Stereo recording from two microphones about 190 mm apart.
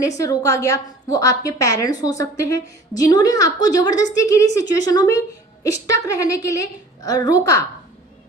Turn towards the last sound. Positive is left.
turn(degrees=15)  # may be behind; listen again after turning